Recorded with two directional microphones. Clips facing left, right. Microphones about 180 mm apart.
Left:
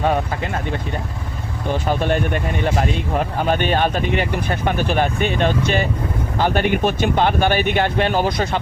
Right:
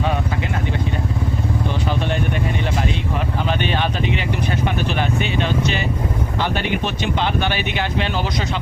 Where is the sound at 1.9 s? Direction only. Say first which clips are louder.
Left 5 dB; 50° left (ahead or behind).